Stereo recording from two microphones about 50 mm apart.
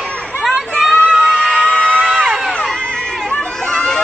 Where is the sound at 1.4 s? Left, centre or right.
Centre.